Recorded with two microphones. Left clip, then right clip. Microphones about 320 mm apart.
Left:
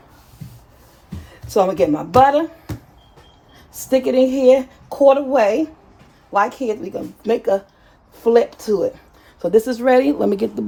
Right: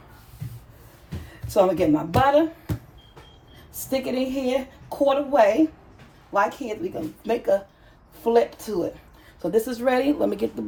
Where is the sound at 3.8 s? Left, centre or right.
Left.